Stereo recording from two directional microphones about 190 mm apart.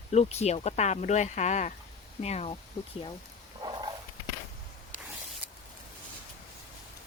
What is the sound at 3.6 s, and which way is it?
Dog, 25° right (ahead or behind).